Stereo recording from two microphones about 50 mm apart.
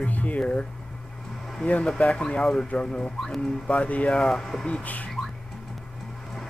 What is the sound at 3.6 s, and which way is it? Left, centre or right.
Speech, left.